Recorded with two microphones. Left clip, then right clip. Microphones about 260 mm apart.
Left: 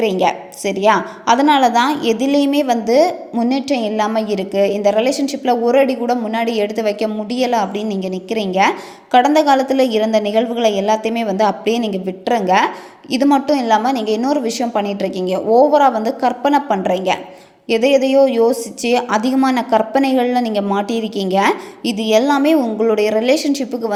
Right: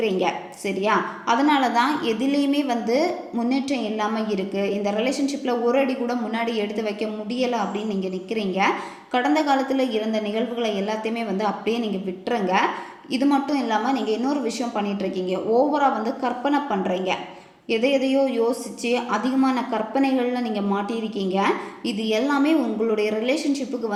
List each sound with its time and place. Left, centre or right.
0.0 s a woman's voice: left